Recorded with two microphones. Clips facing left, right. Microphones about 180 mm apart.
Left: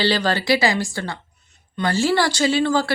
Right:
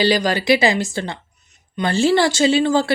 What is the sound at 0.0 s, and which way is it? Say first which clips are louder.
Speech: right 3 dB; 15° right (ahead or behind).